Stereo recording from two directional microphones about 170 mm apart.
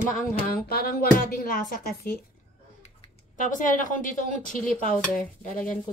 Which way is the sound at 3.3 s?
50° left (ahead or behind).